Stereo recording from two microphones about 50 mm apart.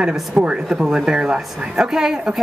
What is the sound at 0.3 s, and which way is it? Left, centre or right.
Speech, centre.